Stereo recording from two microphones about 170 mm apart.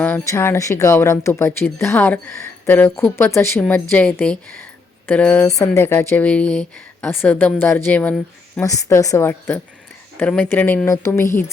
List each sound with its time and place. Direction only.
0.0 s speech: 15° left (ahead or behind)
8.6 s speech: 20° left (ahead or behind)